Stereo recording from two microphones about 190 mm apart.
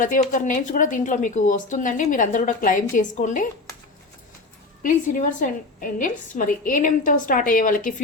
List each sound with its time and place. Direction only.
0.0 s a woman's voice: 45° left (ahead or behind)
4.8 s a woman's voice: 45° left (ahead or behind)